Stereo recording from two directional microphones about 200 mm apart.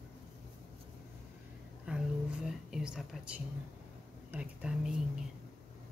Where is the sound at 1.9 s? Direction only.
5° right (ahead or behind).